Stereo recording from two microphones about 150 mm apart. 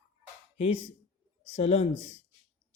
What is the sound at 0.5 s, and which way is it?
Speech, 45° left (ahead or behind).